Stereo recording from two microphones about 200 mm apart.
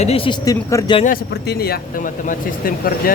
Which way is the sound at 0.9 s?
45° left (ahead or behind).